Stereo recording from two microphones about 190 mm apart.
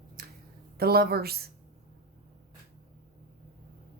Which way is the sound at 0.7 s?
55° right (ahead or behind).